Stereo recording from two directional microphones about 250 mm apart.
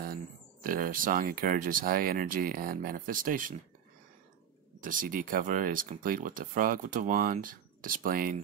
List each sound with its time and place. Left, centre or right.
0.0 s speech: right
4.8 s speech: right